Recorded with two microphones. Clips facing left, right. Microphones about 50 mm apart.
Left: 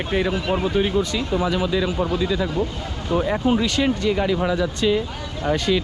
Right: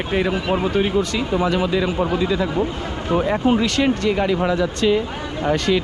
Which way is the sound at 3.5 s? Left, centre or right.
Right.